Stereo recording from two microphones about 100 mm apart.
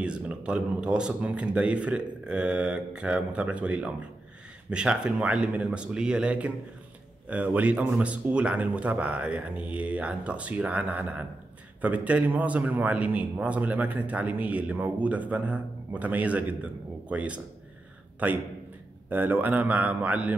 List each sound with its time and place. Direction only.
0.0 s a man's voice: 10° right (ahead or behind)